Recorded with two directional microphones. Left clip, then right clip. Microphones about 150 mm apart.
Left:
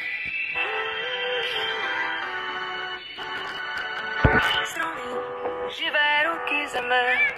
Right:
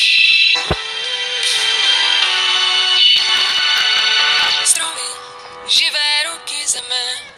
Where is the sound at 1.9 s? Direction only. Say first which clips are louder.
Right 14 dB; 60° right (ahead or behind).